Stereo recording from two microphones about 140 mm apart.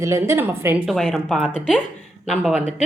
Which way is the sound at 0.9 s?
5° left (ahead or behind).